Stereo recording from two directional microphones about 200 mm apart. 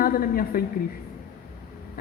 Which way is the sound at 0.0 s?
45° left (ahead or behind).